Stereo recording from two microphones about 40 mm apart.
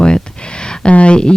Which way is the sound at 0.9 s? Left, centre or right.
Left.